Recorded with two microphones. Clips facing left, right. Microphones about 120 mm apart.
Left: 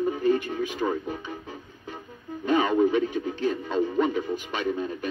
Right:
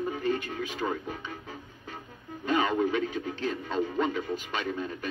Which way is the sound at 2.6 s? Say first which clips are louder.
Left 5 dB; 10° left (ahead or behind).